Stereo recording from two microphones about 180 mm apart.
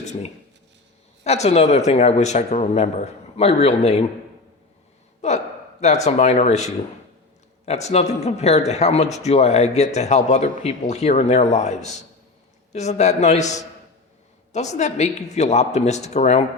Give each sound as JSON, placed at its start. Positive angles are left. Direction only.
{"t": 0.0, "sound": "a sound", "side_deg": 40}
{"t": 1.2, "sound": "speech", "side_deg": 35}
{"t": 5.2, "sound": "speech", "side_deg": 40}